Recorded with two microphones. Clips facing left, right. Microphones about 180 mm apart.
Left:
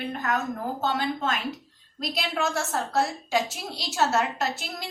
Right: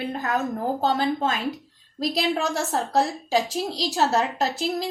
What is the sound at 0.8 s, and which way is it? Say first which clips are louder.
A woman's voice: right 3 dB; 35° right (ahead or behind).